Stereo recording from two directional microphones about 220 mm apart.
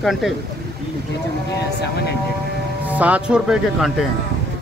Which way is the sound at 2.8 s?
5° right (ahead or behind).